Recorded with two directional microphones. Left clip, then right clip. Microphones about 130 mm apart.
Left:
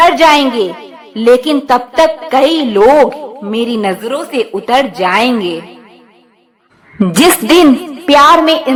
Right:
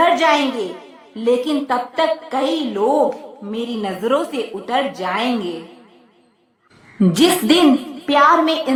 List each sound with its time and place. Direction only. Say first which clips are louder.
0.0 s a woman's voice: left 8 dB; 60° left (ahead or behind)
3.5 s a woman's voice: left 10 dB; 45° left (ahead or behind)
7.2 s a woman's voice: left 7 dB; 55° left (ahead or behind)